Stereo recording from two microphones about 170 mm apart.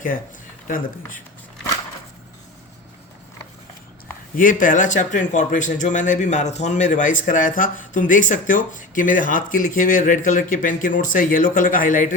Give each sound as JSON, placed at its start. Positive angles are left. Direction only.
{"t": 4.4, "sound": "speech", "side_deg": 50}